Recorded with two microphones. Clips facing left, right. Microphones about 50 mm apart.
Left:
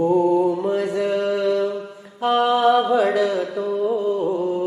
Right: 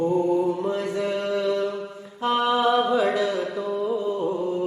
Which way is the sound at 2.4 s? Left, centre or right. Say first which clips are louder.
Left 4 dB; centre.